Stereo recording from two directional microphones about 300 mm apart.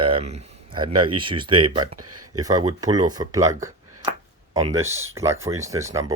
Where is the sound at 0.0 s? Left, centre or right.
Centre.